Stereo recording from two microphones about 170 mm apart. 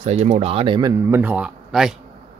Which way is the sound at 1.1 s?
10° right (ahead or behind).